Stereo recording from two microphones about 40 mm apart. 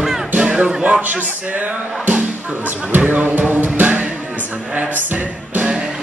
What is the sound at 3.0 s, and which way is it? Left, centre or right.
Music, right.